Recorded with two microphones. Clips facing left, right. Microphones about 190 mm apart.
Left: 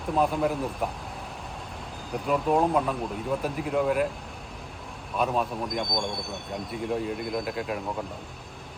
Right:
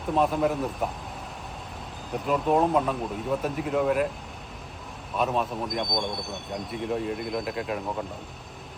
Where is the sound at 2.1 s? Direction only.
Centre (ahead or behind).